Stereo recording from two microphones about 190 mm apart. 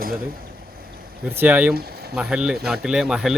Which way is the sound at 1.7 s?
55° right (ahead or behind).